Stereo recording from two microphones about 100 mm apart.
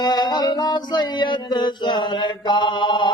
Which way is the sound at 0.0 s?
40° left (ahead or behind).